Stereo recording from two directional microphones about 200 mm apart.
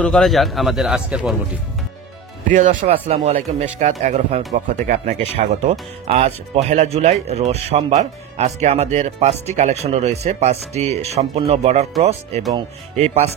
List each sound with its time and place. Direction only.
0.0 s a man's voice: centre (ahead or behind)
2.5 s speech: 40° right (ahead or behind)
2.9 s speech: 30° right (ahead or behind)